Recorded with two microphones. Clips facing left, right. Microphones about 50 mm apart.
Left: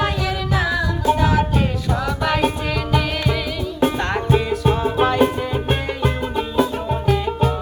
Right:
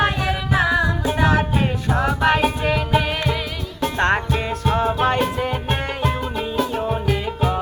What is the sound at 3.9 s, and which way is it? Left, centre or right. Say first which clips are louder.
Music: right 4 dB; right.